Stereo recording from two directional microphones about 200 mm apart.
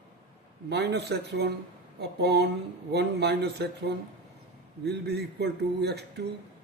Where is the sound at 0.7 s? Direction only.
55° right (ahead or behind).